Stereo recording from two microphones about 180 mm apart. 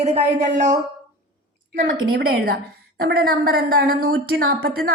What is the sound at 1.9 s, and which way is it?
A woman's voice, 60° right (ahead or behind).